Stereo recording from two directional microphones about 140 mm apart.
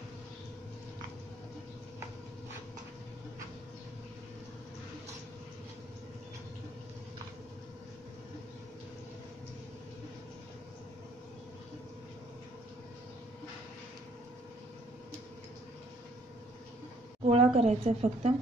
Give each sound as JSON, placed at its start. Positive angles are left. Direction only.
{"t": 17.3, "sound": "speech", "side_deg": -45}